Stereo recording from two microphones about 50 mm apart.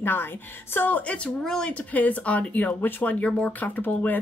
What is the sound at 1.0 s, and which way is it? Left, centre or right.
Speech, left.